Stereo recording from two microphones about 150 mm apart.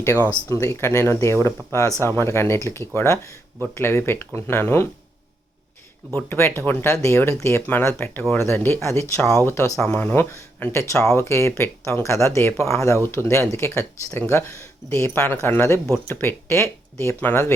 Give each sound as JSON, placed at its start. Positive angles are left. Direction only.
{"t": 0.4, "sound": "speech", "side_deg": 20}
{"t": 6.1, "sound": "speech", "side_deg": 15}